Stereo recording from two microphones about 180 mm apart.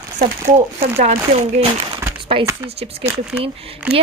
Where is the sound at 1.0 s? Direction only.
35° right (ahead or behind).